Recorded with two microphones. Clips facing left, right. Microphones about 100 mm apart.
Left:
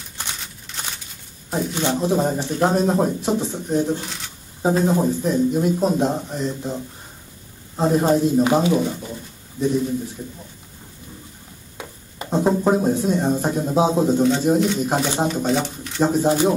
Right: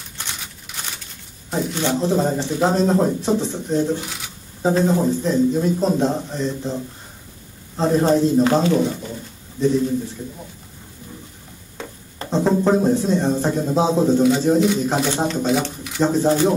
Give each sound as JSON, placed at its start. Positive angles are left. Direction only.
{"t": 0.7, "sound": "a sound", "side_deg": -10}
{"t": 1.5, "sound": "speech", "side_deg": 5}
{"t": 3.9, "sound": "speech", "side_deg": -5}
{"t": 4.6, "sound": "speech", "side_deg": 15}
{"t": 9.0, "sound": "pigeon", "side_deg": 15}
{"t": 11.8, "sound": "speech", "side_deg": 10}